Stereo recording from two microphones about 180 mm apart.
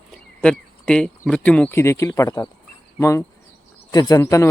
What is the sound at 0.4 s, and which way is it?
A man's voice, 5° left (ahead or behind).